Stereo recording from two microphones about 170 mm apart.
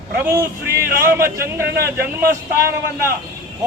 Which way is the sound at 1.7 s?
65° right (ahead or behind).